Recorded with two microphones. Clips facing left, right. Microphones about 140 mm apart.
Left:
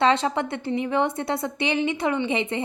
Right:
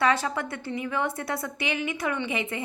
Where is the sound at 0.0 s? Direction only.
25° left (ahead or behind).